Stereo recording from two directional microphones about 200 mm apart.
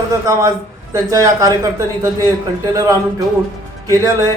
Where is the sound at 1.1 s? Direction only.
15° right (ahead or behind).